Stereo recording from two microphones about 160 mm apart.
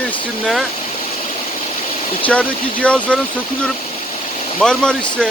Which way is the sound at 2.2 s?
10° left (ahead or behind).